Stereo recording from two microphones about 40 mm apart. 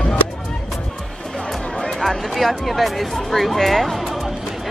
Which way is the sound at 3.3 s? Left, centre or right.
Centre.